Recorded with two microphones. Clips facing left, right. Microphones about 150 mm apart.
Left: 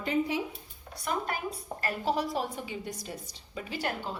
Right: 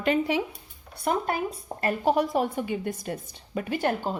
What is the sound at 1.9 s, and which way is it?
A woman's voice, 55° right (ahead or behind).